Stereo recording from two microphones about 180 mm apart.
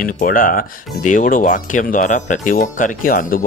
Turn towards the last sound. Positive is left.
turn(degrees=50)  # may be behind; listen again after turning